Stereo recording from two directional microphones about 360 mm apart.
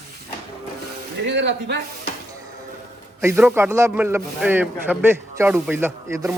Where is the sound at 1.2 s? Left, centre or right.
Right.